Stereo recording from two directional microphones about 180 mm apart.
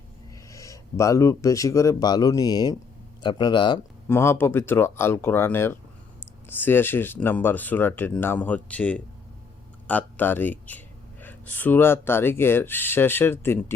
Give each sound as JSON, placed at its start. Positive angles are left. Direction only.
{"t": 0.5, "sound": "speech", "side_deg": 15}
{"t": 4.1, "sound": "speech", "side_deg": 15}